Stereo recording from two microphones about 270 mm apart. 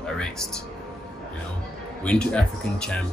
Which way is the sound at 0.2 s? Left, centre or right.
Centre.